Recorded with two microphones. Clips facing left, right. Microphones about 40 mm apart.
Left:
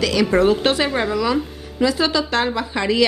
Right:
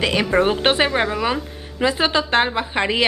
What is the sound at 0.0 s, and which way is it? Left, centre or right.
A woman's voice, right.